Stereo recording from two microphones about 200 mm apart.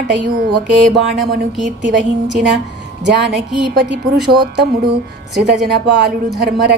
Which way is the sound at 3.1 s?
55° right (ahead or behind).